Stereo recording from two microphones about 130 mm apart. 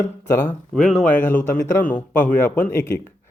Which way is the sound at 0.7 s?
5° left (ahead or behind).